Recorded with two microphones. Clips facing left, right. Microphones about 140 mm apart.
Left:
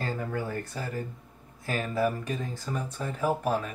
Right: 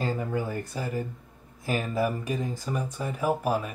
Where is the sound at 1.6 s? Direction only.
15° right (ahead or behind).